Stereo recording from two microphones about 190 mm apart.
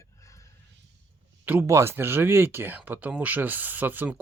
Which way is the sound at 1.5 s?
15° right (ahead or behind).